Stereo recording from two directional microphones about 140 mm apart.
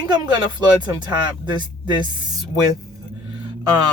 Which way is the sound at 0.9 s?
30° right (ahead or behind).